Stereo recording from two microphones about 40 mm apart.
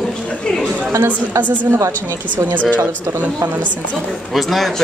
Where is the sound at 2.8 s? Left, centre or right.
Right.